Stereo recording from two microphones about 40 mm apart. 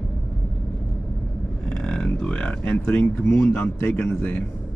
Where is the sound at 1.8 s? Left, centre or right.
Left.